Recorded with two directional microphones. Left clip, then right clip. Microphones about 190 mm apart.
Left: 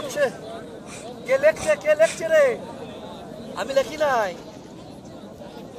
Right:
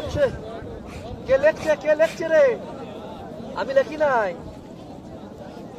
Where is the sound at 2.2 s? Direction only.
40° right (ahead or behind).